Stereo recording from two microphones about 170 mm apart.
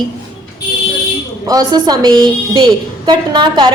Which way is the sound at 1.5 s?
25° right (ahead or behind).